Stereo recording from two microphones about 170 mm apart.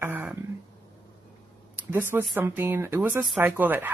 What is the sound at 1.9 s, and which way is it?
Speech, 10° right (ahead or behind).